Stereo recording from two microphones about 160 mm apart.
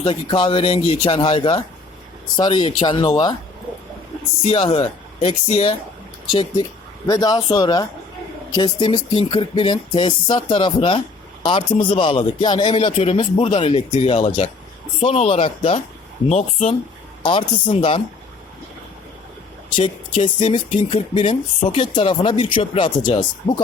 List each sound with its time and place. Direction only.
0.0 s speech: 30° left (ahead or behind)
4.4 s speech: 35° left (ahead or behind)
7.1 s speech: 25° left (ahead or behind); by 16.7 s 40° left (ahead or behind)
17.2 s speech: 30° left (ahead or behind)
19.7 s speech: 30° left (ahead or behind)